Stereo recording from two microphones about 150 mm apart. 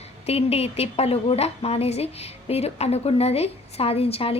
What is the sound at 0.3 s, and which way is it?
A woman's voice, 40° left (ahead or behind).